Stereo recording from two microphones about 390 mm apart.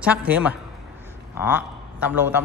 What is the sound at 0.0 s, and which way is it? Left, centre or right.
A man's voice, centre.